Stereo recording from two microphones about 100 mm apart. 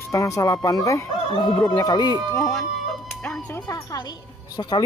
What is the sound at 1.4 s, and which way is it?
Speech, 5° left (ahead or behind).